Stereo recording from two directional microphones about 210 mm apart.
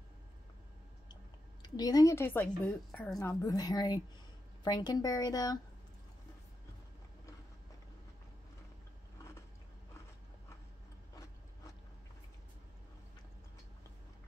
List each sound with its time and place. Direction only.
1.6 s a woman's voice: 20° left (ahead or behind)